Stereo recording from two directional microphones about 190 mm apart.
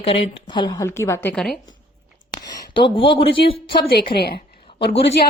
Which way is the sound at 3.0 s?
30° left (ahead or behind).